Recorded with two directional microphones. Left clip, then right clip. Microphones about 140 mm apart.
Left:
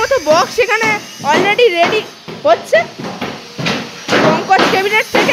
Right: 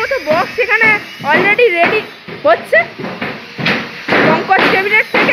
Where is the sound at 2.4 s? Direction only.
30° left (ahead or behind).